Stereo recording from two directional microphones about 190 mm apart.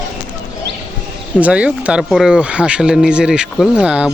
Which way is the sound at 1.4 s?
5° right (ahead or behind).